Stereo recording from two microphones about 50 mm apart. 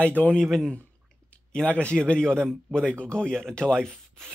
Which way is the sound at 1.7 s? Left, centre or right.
Left.